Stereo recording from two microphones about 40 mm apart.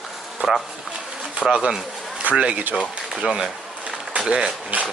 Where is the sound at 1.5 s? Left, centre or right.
Right.